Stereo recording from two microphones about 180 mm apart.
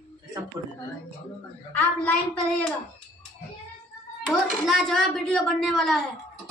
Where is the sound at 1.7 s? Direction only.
10° left (ahead or behind).